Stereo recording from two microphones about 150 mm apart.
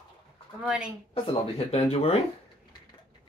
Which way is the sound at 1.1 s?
40° left (ahead or behind).